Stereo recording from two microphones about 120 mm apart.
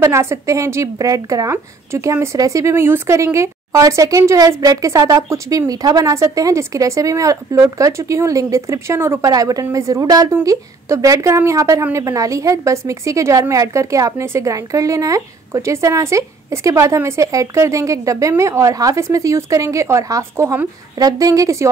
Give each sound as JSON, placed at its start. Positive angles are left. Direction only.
{"t": 0.0, "sound": "a woman's voice", "side_deg": -20}